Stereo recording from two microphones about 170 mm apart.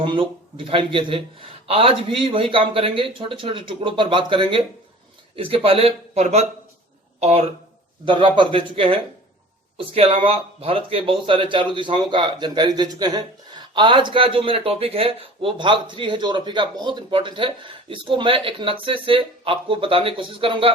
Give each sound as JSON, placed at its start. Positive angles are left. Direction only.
{"t": 0.0, "sound": "speech", "side_deg": -30}